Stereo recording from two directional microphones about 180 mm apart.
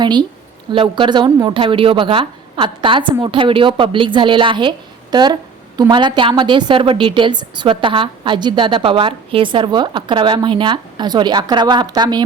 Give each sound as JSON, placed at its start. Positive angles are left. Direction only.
{"t": 0.0, "sound": "a woman's voice", "side_deg": -25}